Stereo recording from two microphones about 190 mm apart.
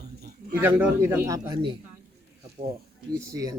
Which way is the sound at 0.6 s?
10° right (ahead or behind).